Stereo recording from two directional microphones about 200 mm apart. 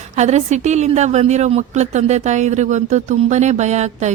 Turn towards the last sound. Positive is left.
turn(degrees=-35)  # may be behind; listen again after turning